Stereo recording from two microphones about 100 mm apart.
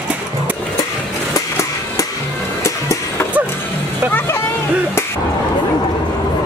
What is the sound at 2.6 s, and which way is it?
Music, 30° left (ahead or behind).